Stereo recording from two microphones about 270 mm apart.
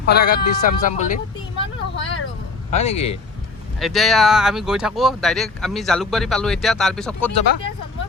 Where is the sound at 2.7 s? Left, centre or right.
Left.